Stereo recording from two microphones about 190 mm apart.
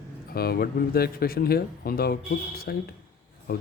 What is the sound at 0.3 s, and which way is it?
Speech, 50° left (ahead or behind).